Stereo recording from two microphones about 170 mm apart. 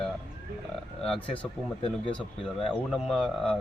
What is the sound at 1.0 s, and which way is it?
Speech, 5° left (ahead or behind).